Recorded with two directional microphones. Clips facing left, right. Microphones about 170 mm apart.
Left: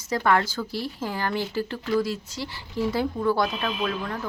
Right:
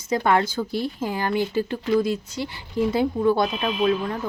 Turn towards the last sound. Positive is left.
turn(degrees=-25)  # may be behind; listen again after turning